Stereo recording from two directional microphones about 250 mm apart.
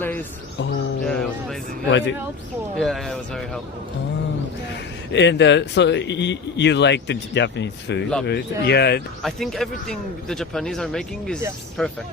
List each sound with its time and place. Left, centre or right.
0.0 s a sound: centre
1.0 s music: centre
1.9 s speech: left
2.7 s speech: centre
5.1 s speech: left
9.2 s speech: centre